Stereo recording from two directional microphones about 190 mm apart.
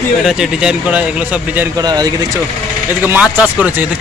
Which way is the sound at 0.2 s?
5° right (ahead or behind).